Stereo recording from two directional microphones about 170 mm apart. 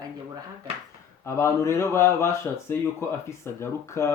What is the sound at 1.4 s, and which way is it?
Speech, 15° left (ahead or behind).